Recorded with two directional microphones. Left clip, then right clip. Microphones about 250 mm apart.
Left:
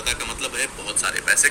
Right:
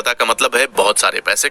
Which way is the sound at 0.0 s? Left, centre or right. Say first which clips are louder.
Right 11 dB; right.